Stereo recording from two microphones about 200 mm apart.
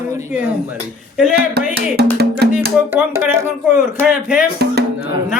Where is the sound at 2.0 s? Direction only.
55° right (ahead or behind).